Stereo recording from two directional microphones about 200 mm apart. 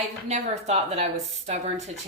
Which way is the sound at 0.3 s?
35° right (ahead or behind).